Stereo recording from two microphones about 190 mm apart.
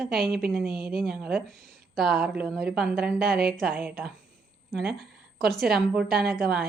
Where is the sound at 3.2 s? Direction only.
55° right (ahead or behind).